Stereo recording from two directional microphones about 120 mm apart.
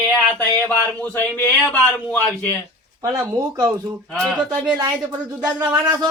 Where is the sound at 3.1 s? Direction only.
30° right (ahead or behind).